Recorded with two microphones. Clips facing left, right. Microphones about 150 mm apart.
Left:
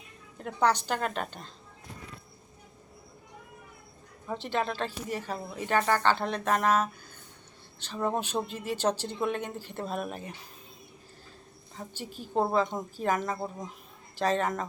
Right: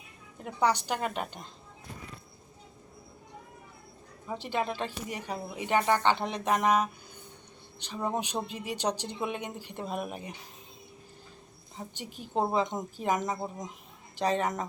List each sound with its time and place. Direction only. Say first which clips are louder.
0.3 s speech: left 1 dB; 10° right (ahead or behind)
4.3 s speech: left 1 dB; 10° right (ahead or behind)
11.9 s speech: left 2 dB; 15° right (ahead or behind)